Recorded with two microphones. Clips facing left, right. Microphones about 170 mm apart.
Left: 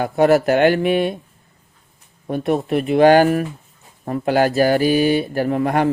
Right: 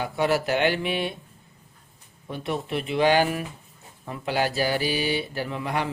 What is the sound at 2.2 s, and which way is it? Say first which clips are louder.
Speech: left 10 dB; 50° left (ahead or behind).